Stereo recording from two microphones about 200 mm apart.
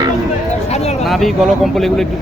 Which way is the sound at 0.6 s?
35° left (ahead or behind).